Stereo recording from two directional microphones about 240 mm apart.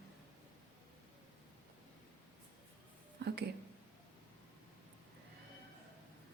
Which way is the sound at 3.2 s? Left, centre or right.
Right.